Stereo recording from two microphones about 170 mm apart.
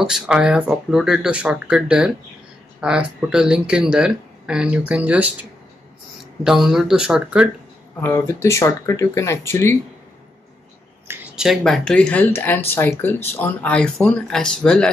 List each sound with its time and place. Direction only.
0.0 s speech: 5° right (ahead or behind)
8.0 s speech: 15° left (ahead or behind)
11.1 s speech: 5° right (ahead or behind)